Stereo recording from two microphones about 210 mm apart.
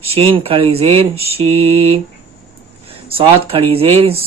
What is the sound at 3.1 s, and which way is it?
Speech, 25° right (ahead or behind).